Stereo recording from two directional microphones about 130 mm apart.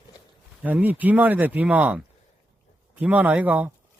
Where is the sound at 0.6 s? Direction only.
15° right (ahead or behind).